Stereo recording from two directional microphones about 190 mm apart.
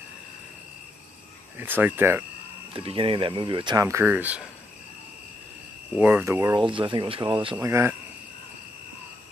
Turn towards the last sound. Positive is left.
turn(degrees=-15)  # may be behind; listen again after turning